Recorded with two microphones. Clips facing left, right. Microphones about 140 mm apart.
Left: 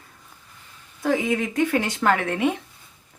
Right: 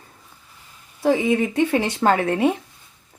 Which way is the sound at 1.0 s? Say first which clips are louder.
Right 4 dB; 30° right (ahead or behind).